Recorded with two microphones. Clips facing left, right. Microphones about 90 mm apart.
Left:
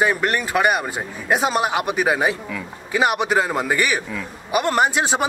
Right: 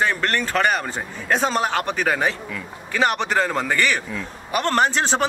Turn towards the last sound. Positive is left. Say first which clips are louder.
# left 1 dB
turn(degrees=10)  # may be behind; listen again after turning